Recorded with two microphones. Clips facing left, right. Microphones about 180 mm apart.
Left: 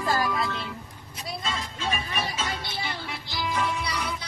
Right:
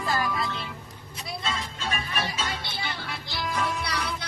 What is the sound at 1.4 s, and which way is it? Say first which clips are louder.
Music: left 1 dB; centre (ahead or behind).